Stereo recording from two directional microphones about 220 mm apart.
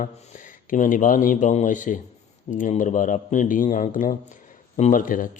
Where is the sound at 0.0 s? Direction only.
35° left (ahead or behind).